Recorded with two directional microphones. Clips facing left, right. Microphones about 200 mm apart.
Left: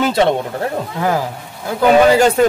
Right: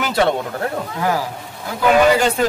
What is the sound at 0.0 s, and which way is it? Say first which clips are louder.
Speech: left 3 dB; 25° left (ahead or behind).